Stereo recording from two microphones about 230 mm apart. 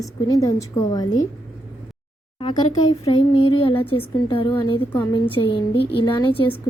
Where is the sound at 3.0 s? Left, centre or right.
Left.